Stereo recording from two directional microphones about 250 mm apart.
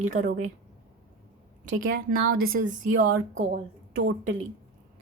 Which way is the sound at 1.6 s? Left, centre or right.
Right.